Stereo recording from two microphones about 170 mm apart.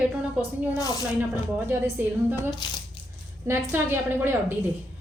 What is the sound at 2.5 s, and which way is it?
Speech, 25° left (ahead or behind).